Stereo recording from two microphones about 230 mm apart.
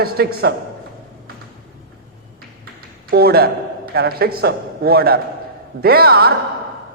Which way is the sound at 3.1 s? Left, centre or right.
Right.